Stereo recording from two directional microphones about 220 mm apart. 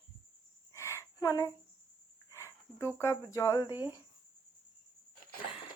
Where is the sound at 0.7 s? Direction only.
15° left (ahead or behind).